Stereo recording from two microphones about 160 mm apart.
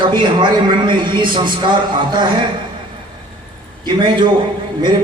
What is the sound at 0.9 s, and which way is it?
Speech, 30° right (ahead or behind).